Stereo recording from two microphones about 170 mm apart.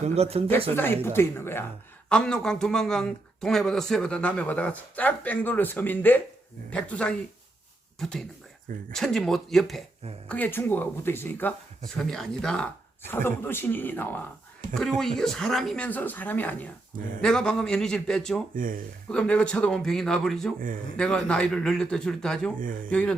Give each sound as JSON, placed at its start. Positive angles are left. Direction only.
{"t": 0.0, "sound": "speech", "side_deg": -35}
{"t": 0.7, "sound": "speech", "side_deg": 15}
{"t": 18.5, "sound": "speech", "side_deg": -55}
{"t": 19.1, "sound": "speech", "side_deg": 5}
{"t": 22.5, "sound": "speech", "side_deg": -55}
{"t": 22.9, "sound": "speech", "side_deg": 5}